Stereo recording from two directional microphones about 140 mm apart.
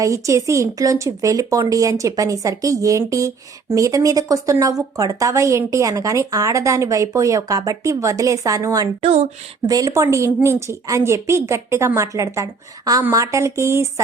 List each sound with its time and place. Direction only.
0.0 s speech: 20° right (ahead or behind)
9.0 s speech: 50° right (ahead or behind)
9.6 s speech: 25° right (ahead or behind)